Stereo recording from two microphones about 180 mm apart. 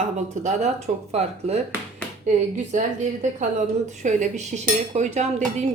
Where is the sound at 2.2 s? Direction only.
40° right (ahead or behind).